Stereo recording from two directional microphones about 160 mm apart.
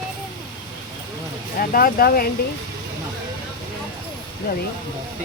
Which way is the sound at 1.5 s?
65° left (ahead or behind).